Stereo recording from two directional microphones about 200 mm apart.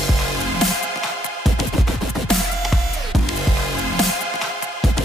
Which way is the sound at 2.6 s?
Centre (ahead or behind).